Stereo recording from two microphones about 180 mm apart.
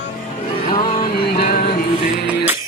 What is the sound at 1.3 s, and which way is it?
Music, 60° left (ahead or behind).